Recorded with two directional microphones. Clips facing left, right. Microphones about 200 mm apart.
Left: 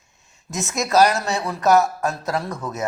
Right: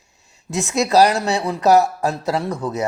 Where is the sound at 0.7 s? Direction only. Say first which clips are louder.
Right 2 dB; 35° right (ahead or behind).